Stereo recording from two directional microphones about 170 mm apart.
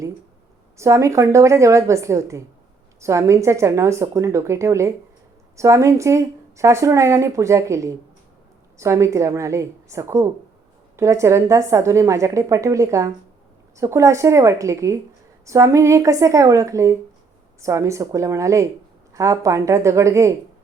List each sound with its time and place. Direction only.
0.8 s speech: 15° right (ahead or behind)